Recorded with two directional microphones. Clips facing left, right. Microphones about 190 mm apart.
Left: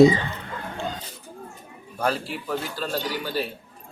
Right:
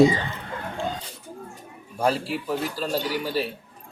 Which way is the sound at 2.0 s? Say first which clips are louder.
Right 2 dB; 5° right (ahead or behind).